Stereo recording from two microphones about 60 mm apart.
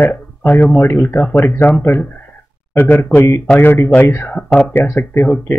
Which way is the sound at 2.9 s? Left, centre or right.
Left.